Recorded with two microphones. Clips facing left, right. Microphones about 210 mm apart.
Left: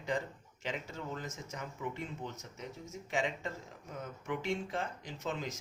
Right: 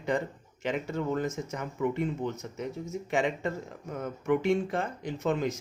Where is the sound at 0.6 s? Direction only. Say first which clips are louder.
Right 10 dB; 60° right (ahead or behind).